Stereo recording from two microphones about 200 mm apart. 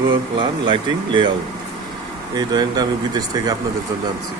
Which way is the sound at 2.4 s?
20° right (ahead or behind).